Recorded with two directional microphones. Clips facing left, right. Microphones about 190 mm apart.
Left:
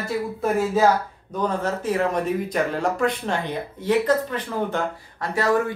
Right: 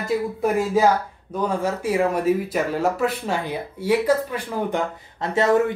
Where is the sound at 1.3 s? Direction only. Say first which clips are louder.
Right 1 dB; 10° right (ahead or behind).